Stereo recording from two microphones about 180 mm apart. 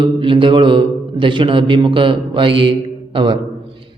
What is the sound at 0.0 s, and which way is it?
A man's voice, 30° right (ahead or behind).